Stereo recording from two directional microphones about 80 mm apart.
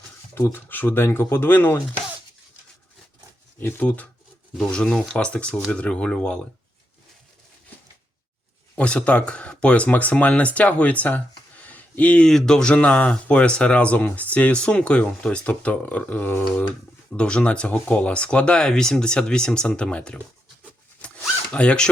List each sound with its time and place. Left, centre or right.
0.3 s speech: left
3.6 s speech: left
3.8 s speech: centre
4.5 s speech: centre
8.7 s speech: centre
11.7 s a sound: centre
12.3 s speech: centre
21.5 s speech: centre